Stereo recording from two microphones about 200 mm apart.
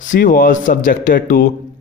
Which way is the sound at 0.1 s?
45° left (ahead or behind).